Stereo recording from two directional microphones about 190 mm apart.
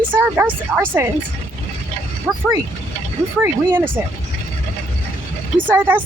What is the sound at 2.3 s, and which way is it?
Speech, centre (ahead or behind).